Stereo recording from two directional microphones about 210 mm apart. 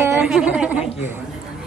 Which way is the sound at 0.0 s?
10° right (ahead or behind).